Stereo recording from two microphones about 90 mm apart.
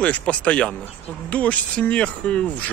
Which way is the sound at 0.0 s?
15° left (ahead or behind).